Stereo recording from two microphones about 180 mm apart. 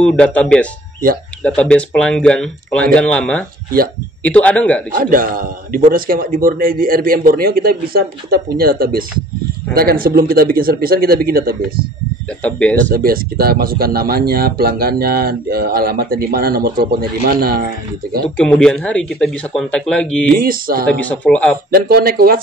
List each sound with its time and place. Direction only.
0.0 s a man's voice: 5° left (ahead or behind)
4.9 s a man's voice: 50° right (ahead or behind)
12.4 s speech: 5° left (ahead or behind)
12.9 s speech: 55° right (ahead or behind)
18.2 s speech: 5° left (ahead or behind)
20.3 s a man's voice: 55° right (ahead or behind)
21.0 s a man's voice: 5° left (ahead or behind)
21.6 s speech: 55° right (ahead or behind)